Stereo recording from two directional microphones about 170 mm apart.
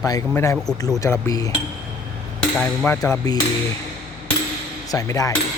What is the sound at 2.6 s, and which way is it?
Speech, 10° left (ahead or behind).